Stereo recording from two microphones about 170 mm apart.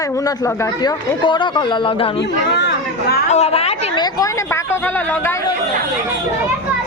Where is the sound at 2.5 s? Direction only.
75° left (ahead or behind).